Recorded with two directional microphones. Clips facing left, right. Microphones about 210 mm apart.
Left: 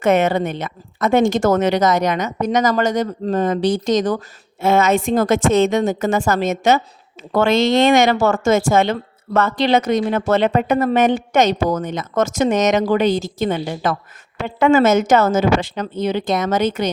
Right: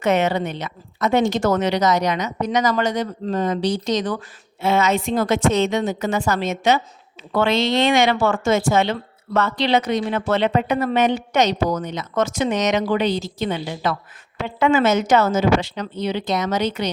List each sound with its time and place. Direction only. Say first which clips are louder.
0.0 s speech: left 3 dB; 50° left (ahead or behind)